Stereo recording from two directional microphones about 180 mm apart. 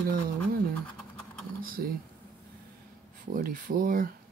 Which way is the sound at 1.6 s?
55° right (ahead or behind).